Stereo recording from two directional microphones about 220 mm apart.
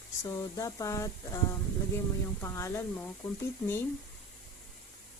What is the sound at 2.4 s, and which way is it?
Speech, 10° left (ahead or behind).